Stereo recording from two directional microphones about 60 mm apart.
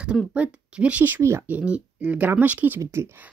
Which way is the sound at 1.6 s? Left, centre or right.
Centre.